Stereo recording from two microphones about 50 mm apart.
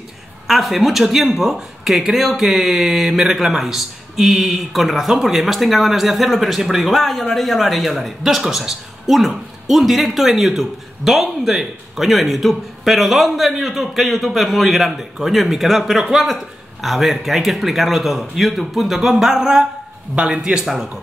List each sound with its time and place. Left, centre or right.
0.5 s speech: centre
20.2 s speech: centre
20.7 s speech: centre